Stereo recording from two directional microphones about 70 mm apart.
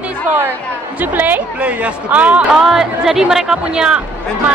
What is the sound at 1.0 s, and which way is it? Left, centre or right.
A woman's voice, right.